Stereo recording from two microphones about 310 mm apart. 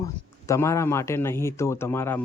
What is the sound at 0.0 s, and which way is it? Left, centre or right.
A man's voice, centre.